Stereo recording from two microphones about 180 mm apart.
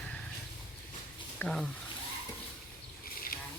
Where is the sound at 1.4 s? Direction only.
5° left (ahead or behind).